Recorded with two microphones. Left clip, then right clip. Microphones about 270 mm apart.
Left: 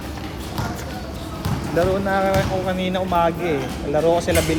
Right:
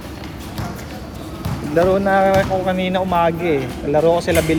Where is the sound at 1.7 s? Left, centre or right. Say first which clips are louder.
Right 5 dB; right.